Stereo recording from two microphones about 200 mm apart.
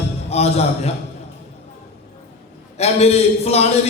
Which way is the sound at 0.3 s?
30° left (ahead or behind).